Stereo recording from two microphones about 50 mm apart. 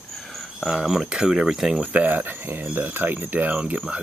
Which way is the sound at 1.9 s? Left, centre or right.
Right.